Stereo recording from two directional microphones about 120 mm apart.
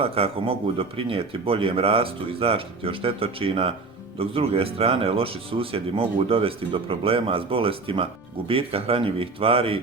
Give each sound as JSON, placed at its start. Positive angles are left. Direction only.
{"t": 0.0, "sound": "speech", "side_deg": -55}